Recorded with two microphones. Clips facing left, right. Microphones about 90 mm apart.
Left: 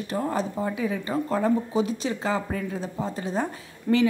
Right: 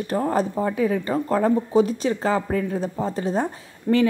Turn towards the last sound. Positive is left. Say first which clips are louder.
# right 3 dB
turn(degrees=-40)  # may be behind; listen again after turning